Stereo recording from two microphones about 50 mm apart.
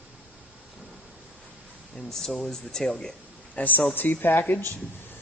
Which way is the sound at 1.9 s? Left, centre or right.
Centre.